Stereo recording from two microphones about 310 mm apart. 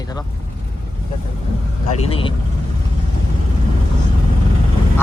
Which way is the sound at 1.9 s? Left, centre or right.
Centre.